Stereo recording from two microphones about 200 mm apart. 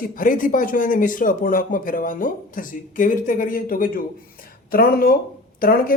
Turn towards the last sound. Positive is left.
turn(degrees=45)  # may be behind; listen again after turning